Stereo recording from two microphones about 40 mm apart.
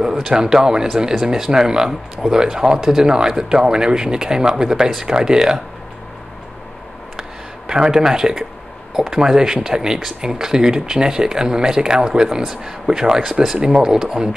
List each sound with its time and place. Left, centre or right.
0.0 s speech: centre
7.6 s speech: centre